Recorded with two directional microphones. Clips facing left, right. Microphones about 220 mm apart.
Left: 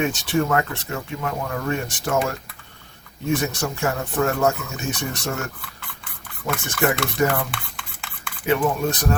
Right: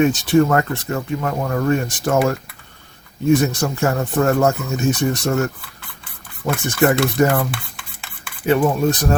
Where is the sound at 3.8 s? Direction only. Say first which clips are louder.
Right 4 dB; 45° right (ahead or behind).